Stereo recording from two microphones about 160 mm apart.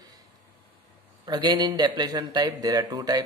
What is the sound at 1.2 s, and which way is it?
Speech, 25° right (ahead or behind).